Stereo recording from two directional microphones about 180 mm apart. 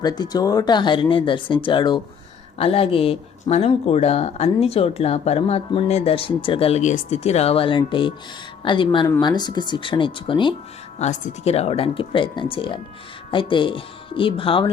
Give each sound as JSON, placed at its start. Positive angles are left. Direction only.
{"t": 0.0, "sound": "speech", "side_deg": 20}
{"t": 11.0, "sound": "speech", "side_deg": 35}